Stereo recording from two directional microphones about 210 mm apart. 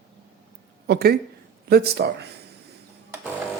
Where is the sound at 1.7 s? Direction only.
50° right (ahead or behind).